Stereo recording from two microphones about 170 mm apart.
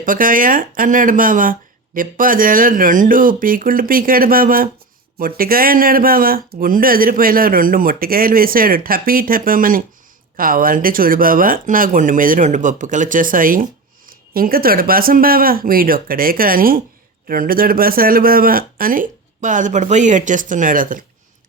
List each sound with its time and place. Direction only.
0.0 s speech: 55° right (ahead or behind)